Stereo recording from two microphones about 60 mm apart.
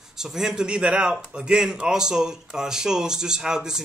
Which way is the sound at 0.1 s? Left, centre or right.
Centre.